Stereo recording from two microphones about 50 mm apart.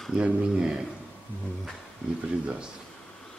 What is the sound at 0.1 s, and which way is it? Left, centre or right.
Speech, centre.